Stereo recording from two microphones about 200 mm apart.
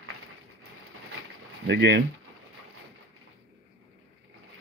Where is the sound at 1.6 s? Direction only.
60° right (ahead or behind).